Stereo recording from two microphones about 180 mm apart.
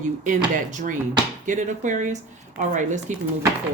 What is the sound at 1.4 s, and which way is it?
Speech, 45° right (ahead or behind).